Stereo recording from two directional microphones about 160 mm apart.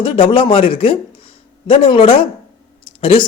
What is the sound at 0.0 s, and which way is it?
Speech, 35° left (ahead or behind).